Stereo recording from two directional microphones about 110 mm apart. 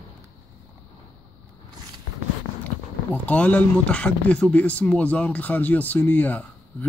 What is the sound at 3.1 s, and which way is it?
Speech, 15° left (ahead or behind).